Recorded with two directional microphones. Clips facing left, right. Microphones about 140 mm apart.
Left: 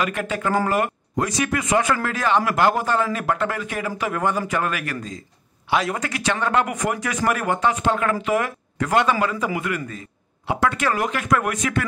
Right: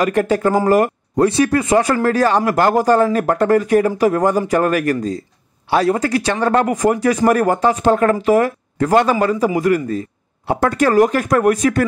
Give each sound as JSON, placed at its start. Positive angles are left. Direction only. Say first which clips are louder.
{"t": 0.0, "sound": "a man's voice", "louder": "right 9 dB", "side_deg": -40}